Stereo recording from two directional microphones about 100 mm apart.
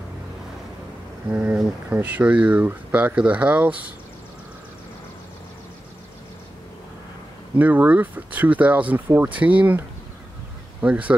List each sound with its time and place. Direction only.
1.3 s speech: 15° right (ahead or behind)
7.5 s speech: 15° right (ahead or behind)